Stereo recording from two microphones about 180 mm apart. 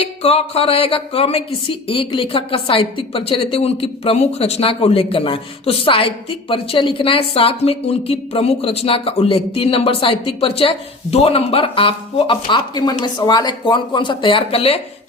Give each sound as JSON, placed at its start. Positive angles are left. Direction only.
{"t": 0.0, "sound": "speech", "side_deg": 35}